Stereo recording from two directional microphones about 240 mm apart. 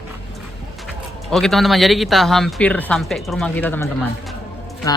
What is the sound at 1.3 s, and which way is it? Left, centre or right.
Speech, centre.